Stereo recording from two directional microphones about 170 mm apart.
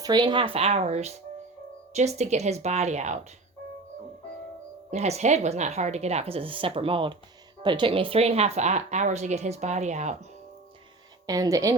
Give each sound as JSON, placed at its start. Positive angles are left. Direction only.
{"t": 0.0, "sound": "speech", "side_deg": -25}
{"t": 4.9, "sound": "speech", "side_deg": -40}
{"t": 11.3, "sound": "speech", "side_deg": -20}